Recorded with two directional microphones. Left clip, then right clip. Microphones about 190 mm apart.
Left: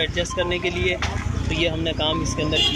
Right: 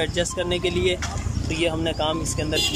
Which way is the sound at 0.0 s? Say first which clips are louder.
Left 1 dB; 10° right (ahead or behind).